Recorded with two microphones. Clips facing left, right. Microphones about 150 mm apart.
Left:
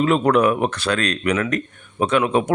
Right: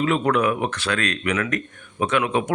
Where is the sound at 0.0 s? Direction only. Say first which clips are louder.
Left 4 dB; 35° left (ahead or behind).